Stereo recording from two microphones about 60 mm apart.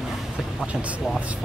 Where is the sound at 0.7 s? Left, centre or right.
Right.